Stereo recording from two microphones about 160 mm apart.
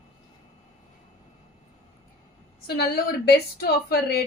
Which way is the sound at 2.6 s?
80° left.